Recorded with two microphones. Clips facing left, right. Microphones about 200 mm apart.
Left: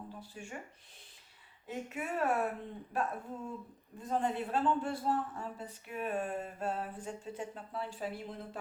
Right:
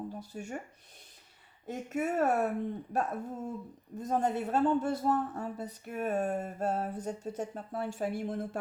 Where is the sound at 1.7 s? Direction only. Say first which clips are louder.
Right 6 dB; 40° right (ahead or behind).